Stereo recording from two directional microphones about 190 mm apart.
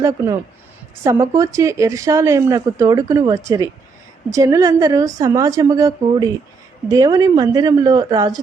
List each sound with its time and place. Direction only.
1.0 s a woman's voice: 15° right (ahead or behind)